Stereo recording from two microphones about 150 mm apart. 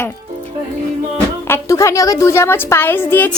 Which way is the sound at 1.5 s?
20° left (ahead or behind).